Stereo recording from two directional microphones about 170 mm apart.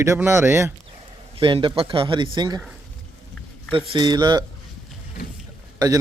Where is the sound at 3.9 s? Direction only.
25° right (ahead or behind).